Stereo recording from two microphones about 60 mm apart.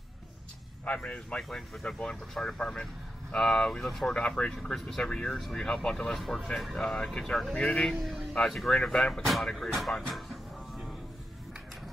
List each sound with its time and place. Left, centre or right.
0.8 s speech: left
1.5 s speech: centre
6.1 s speech: centre
7.9 s speech: centre
9.8 s music: centre